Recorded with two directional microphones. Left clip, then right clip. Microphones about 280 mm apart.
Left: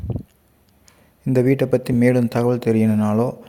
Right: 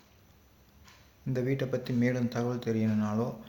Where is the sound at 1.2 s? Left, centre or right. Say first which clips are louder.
Left 14 dB; left.